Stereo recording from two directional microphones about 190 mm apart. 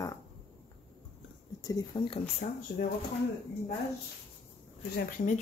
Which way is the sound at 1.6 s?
20° left (ahead or behind).